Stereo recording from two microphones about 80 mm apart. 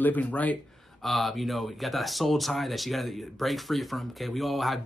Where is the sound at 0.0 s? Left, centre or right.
Left.